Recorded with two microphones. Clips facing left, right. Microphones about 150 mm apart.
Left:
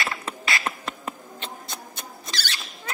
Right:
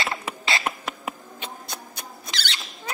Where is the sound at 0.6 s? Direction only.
10° right (ahead or behind).